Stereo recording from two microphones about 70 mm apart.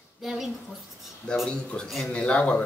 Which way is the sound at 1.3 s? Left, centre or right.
Centre.